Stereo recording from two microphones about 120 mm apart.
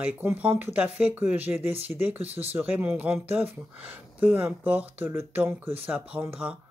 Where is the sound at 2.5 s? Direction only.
20° right (ahead or behind).